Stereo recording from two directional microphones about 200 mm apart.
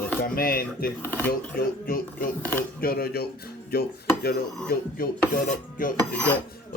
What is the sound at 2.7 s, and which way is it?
Music, 50° left (ahead or behind).